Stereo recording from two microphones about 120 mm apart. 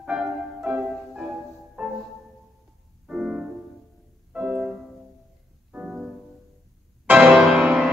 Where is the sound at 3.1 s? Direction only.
5° right (ahead or behind).